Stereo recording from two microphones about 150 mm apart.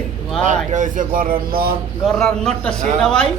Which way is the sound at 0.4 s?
55° right (ahead or behind).